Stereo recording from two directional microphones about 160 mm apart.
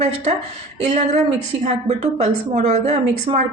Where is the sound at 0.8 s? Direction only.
45° right (ahead or behind).